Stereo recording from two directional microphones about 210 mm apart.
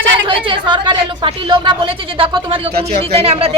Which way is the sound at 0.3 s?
25° right (ahead or behind).